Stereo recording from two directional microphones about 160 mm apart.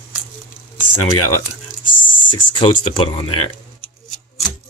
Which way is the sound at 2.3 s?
30° left (ahead or behind).